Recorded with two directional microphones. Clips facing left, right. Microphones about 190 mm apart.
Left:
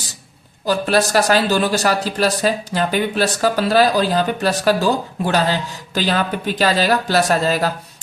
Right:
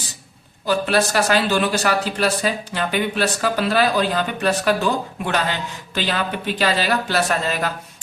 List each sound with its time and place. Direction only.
0.6 s speech: 40° left (ahead or behind)